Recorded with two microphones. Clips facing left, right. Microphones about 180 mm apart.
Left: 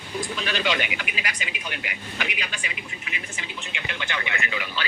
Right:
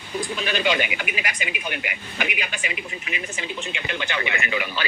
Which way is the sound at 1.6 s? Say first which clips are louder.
Right 3 dB; 55° right (ahead or behind).